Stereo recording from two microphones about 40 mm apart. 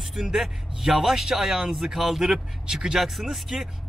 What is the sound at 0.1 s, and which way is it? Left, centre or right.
Speech, centre.